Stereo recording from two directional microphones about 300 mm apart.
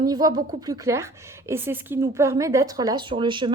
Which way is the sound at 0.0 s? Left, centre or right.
Centre.